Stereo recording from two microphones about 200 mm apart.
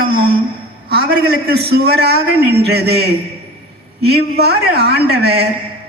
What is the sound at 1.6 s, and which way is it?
A woman's voice, 55° right (ahead or behind).